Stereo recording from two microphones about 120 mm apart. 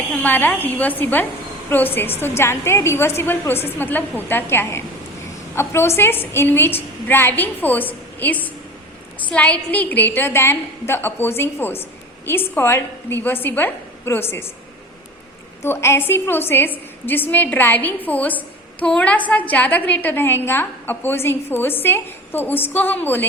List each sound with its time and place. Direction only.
0.1 s a woman's voice: 15° left (ahead or behind)
15.6 s a woman's voice: 20° left (ahead or behind)